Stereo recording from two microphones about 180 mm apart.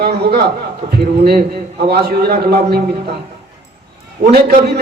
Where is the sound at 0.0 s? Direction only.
60° right (ahead or behind).